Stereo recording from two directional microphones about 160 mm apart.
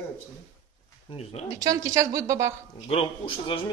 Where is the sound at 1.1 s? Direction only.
40° left (ahead or behind).